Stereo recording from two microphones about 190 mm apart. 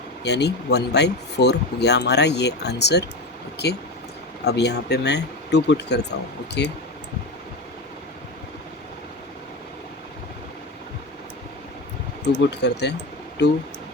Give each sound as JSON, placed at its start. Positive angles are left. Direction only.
{"t": 0.3, "sound": "speech", "side_deg": 60}
{"t": 12.4, "sound": "speech", "side_deg": 65}